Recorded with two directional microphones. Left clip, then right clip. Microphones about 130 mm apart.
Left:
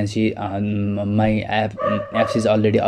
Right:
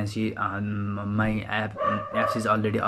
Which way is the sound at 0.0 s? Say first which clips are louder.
Left 6 dB; 25° left (ahead or behind).